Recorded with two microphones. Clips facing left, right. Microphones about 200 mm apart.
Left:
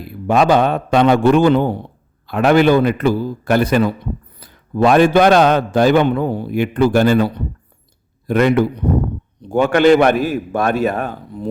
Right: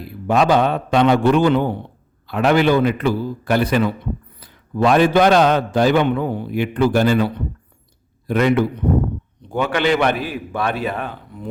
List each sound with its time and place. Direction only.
0.3 s a man's voice: 50° left (ahead or behind)